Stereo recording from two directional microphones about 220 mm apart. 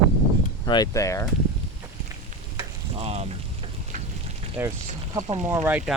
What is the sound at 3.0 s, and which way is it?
Rain on surface, 30° right (ahead or behind).